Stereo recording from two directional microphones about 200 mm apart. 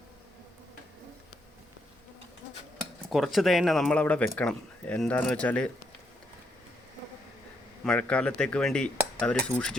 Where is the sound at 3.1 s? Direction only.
Centre (ahead or behind).